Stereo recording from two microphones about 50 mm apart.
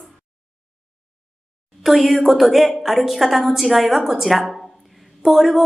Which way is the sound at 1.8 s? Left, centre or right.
Centre.